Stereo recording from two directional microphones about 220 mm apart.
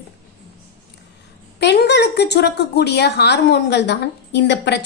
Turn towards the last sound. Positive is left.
turn(degrees=50)  # may be behind; listen again after turning